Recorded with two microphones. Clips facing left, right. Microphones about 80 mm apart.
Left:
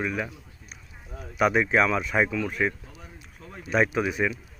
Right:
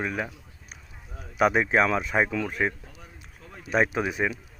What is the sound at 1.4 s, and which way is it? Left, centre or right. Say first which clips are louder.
Speech: even; right.